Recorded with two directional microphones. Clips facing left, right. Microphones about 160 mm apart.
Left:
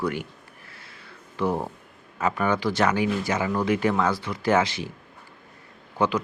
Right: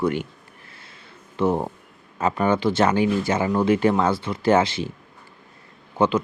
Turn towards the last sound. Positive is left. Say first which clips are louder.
# right 4 dB
turn(degrees=-25)  # may be behind; listen again after turning